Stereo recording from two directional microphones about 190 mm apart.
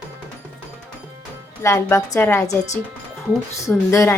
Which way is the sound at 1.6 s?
15° left (ahead or behind).